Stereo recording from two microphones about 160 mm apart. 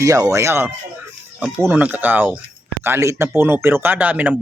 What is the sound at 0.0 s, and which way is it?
Speech, 20° right (ahead or behind).